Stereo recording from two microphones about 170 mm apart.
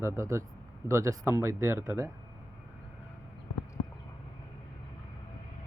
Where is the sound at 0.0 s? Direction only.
15° right (ahead or behind).